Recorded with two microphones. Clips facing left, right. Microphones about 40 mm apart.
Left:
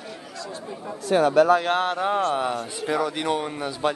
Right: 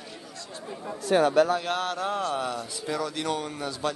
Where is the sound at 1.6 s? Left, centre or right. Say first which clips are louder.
Left 6 dB; left.